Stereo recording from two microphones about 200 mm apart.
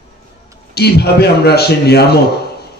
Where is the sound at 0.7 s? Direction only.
55° left (ahead or behind).